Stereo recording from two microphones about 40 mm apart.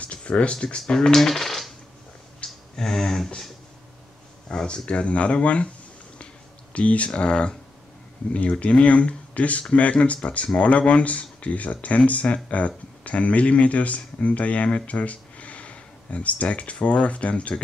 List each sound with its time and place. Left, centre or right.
0.0 s speech: left
0.9 s speech: centre
2.4 s a sound: centre
4.5 s speech: left
6.7 s speech: left
7.1 s speech: left
8.3 s speech: left